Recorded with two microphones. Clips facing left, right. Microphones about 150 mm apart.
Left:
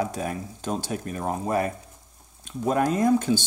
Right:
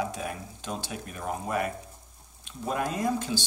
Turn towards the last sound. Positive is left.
turn(degrees=50)  # may be behind; listen again after turning